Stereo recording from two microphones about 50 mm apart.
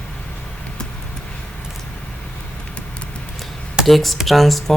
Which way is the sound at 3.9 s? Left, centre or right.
Centre.